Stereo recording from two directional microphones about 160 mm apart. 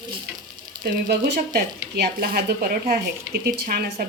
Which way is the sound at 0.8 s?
80° right.